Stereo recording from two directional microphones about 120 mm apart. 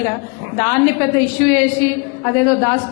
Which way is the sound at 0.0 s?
20° left (ahead or behind).